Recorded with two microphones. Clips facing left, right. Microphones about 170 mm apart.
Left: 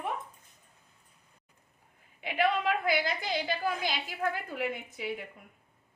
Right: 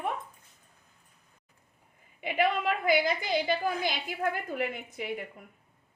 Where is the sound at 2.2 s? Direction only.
50° right (ahead or behind).